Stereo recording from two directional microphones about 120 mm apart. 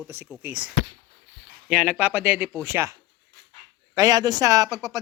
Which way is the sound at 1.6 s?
10° right (ahead or behind).